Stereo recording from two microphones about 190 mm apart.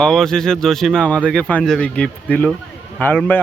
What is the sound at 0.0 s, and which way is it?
Speech, 5° left (ahead or behind).